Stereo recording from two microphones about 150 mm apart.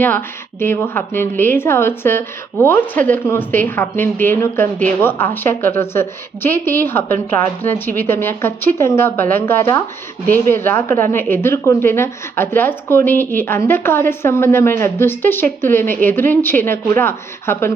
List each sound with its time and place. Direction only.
0.0 s speech: 15° left (ahead or behind)